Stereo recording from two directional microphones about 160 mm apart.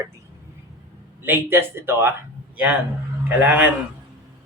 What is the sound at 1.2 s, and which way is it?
A man's voice, 15° right (ahead or behind).